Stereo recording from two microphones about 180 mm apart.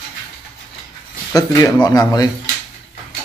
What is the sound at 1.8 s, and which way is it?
Speech, 20° left (ahead or behind).